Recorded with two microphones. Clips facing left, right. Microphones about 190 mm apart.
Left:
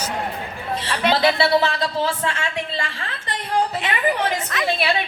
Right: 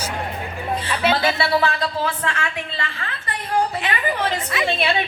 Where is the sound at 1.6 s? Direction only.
25° left (ahead or behind).